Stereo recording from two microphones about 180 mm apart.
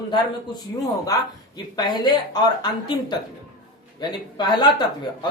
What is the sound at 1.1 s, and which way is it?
Speech, 20° left (ahead or behind).